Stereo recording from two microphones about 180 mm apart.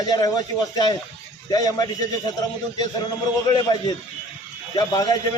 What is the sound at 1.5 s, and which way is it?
Speech, 20° left (ahead or behind).